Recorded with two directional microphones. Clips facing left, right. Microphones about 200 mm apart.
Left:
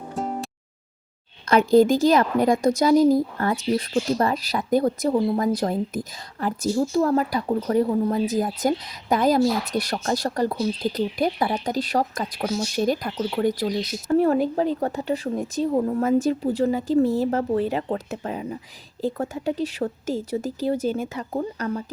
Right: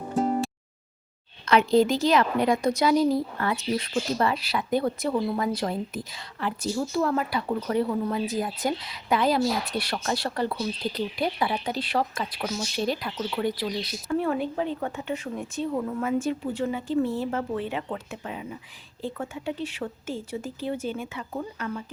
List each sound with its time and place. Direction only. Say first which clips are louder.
0.2 s music: right 4 dB; centre (ahead or behind)
1.5 s a woman's voice: left 4 dB; 50° left (ahead or behind); by 8.2 s 35° left (ahead or behind)
8.3 s speech: left 5 dB; 45° left (ahead or behind)